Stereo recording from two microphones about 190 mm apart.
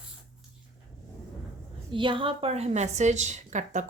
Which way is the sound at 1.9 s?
25° right (ahead or behind).